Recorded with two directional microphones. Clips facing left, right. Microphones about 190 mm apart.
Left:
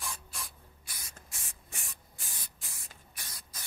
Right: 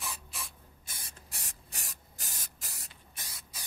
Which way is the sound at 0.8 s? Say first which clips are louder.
Even; 30° right (ahead or behind).